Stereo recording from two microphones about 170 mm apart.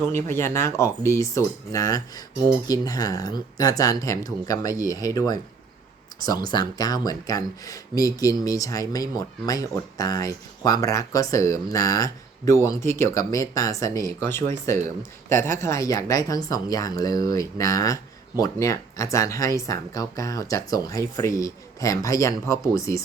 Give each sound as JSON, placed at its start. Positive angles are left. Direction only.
{"t": 0.1, "sound": "speech", "side_deg": 15}
{"t": 6.5, "sound": "speech", "side_deg": 25}
{"t": 15.3, "sound": "speech", "side_deg": 15}